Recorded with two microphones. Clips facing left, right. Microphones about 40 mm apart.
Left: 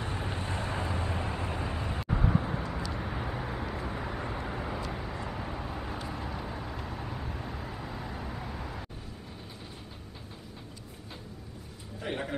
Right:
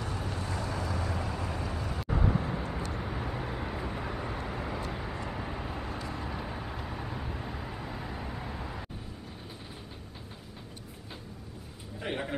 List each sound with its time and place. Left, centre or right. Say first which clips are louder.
0.0 s vehicle: left 1 dB; left
2.0 s vehicle: even; centre
12.0 s a sound: even; centre